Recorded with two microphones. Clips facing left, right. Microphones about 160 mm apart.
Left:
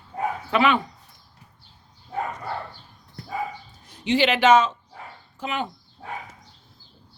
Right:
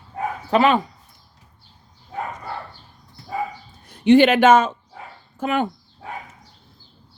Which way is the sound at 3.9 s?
55° right (ahead or behind).